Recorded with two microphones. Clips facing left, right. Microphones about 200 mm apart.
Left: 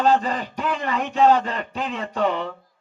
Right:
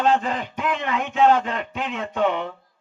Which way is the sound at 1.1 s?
Centre (ahead or behind).